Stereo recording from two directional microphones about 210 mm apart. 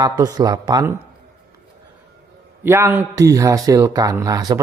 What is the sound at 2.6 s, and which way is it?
A man's voice, 10° right (ahead or behind).